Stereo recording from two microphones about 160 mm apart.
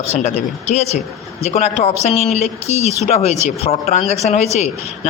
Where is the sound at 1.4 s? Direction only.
40° left (ahead or behind).